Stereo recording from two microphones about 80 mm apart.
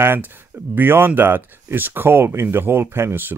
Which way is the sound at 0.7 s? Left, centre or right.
Right.